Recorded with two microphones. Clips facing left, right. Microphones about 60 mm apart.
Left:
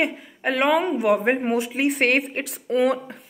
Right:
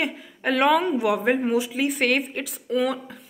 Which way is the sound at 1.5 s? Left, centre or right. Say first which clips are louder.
Left 1 dB; left.